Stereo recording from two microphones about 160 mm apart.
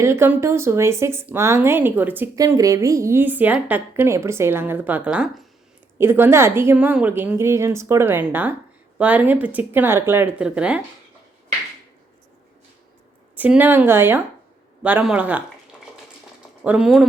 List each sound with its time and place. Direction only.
0.0 s a woman's voice: 15° right (ahead or behind)
6.0 s a woman's voice: 15° right (ahead or behind)
13.3 s a woman's voice: 10° right (ahead or behind)
16.6 s speech: 5° right (ahead or behind)